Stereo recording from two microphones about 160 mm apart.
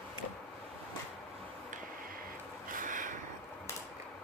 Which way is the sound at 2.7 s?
55° right (ahead or behind).